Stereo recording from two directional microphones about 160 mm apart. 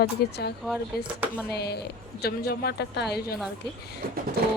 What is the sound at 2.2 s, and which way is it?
Speech, 80° left.